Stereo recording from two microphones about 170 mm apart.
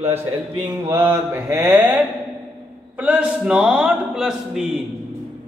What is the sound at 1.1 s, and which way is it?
A man's voice, 10° right (ahead or behind).